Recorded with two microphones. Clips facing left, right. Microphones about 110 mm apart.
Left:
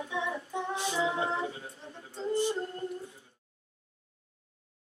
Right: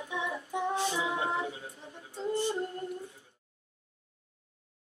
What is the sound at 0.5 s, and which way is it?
Female singing, 15° right (ahead or behind).